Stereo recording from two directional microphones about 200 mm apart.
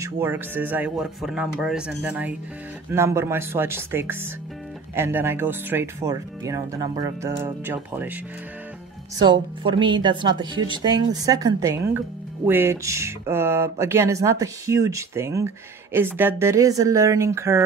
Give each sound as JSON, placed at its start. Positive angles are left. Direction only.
{"t": 0.0, "sound": "speech", "side_deg": -10}
{"t": 9.2, "sound": "a woman's voice", "side_deg": -25}